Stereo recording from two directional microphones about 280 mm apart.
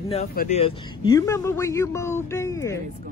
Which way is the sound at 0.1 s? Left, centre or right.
Left.